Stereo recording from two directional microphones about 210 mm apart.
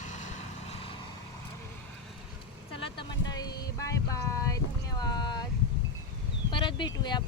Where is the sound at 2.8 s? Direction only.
20° left (ahead or behind).